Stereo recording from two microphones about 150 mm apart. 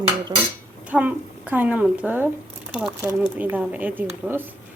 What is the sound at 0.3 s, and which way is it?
Dishes, 25° right (ahead or behind).